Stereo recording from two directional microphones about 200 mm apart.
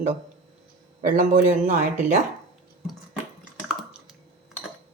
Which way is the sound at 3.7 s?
Centre (ahead or behind).